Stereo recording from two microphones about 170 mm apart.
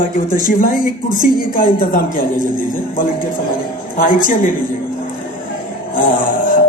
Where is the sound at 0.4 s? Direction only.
55° left (ahead or behind).